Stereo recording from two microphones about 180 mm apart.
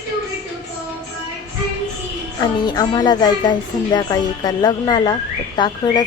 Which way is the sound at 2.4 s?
25° left (ahead or behind).